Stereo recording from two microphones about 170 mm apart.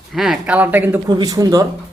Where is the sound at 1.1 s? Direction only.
25° right (ahead or behind).